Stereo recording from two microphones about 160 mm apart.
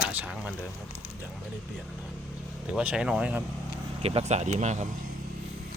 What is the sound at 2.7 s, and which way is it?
Speech, 5° right (ahead or behind).